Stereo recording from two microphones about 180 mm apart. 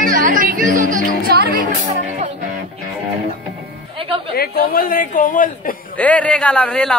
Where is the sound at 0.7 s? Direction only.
45° right (ahead or behind).